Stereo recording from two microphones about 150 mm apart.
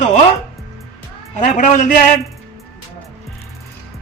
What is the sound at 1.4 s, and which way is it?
Speech, 55° left (ahead or behind).